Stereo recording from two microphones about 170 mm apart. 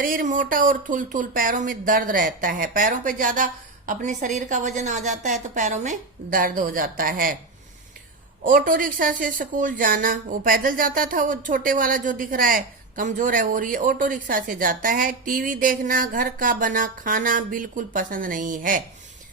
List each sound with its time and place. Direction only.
0.0 s a woman's voice: 55° right (ahead or behind)
8.4 s a woman's voice: 55° right (ahead or behind)